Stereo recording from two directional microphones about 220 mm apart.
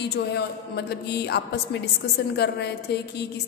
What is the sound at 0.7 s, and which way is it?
A woman's voice, 50° left (ahead or behind).